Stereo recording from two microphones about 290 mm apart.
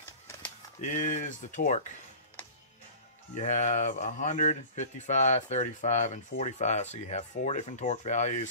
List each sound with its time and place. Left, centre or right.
0.7 s speech: left
3.3 s speech: left